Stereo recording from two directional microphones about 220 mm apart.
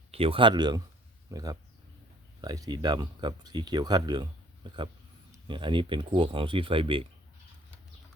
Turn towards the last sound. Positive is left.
turn(degrees=-25)  # may be behind; listen again after turning